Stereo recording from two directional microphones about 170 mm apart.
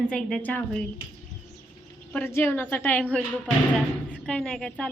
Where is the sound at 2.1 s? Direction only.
15° left (ahead or behind).